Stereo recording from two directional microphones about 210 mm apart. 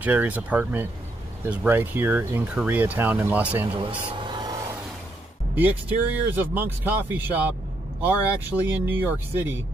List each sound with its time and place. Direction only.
0.0 s speech: 10° right (ahead or behind)
4.2 s vehicle: 20° right (ahead or behind)
5.6 s speech: 10° right (ahead or behind)